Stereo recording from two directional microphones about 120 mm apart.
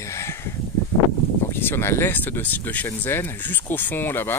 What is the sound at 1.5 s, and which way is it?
Speech, 20° left (ahead or behind).